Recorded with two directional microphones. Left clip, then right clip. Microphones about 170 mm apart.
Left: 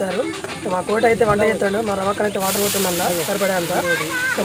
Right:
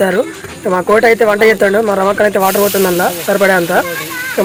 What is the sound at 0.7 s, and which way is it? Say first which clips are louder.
Speech: right 7 dB; 30° right (ahead or behind).